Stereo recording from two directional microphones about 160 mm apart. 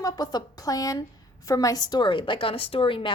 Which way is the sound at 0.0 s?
25° left (ahead or behind).